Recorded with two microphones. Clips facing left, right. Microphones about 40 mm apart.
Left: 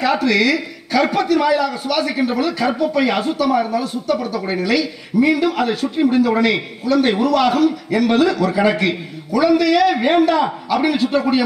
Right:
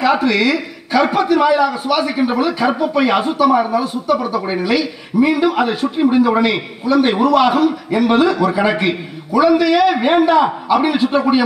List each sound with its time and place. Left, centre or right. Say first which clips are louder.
0.0 s a man's voice: right 2 dB; centre